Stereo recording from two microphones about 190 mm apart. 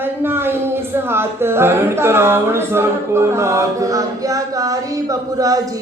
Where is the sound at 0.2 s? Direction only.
10° right (ahead or behind).